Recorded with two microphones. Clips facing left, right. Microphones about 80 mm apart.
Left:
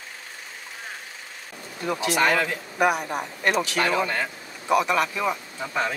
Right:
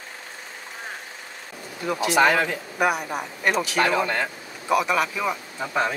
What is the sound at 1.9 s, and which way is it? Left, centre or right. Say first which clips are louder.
Speech: right 1 dB; centre.